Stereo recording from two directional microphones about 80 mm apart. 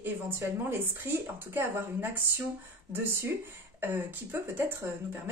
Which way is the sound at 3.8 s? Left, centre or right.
Right.